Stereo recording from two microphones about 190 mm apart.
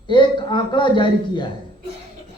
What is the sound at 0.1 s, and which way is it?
Speech, 25° left (ahead or behind).